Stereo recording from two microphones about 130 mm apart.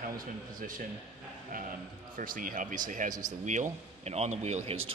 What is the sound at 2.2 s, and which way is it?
Speech, 90° right.